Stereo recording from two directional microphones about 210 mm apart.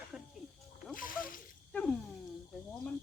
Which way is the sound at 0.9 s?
40° left (ahead or behind).